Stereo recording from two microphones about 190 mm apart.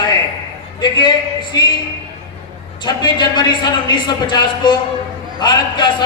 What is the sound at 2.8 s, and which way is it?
Speech, 25° left (ahead or behind).